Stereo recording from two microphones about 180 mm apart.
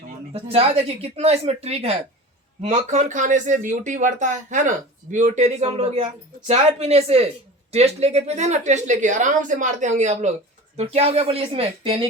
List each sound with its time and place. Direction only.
0.3 s a woman's voice: 35° right (ahead or behind)